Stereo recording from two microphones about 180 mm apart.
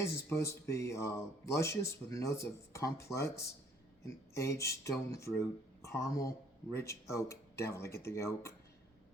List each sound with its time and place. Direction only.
0.0 s speech: 15° left (ahead or behind)